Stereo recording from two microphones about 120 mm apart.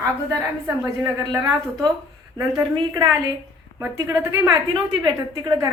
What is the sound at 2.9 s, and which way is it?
A woman's voice, 25° right (ahead or behind).